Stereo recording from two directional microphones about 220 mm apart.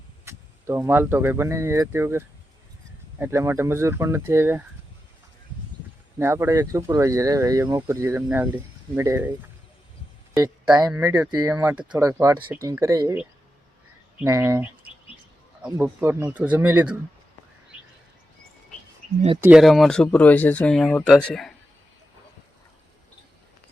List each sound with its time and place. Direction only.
0.3 s speech: 10° right (ahead or behind)
6.1 s speech: 10° right (ahead or behind)
10.3 s speech: 10° right (ahead or behind)
19.4 s speech: 5° right (ahead or behind)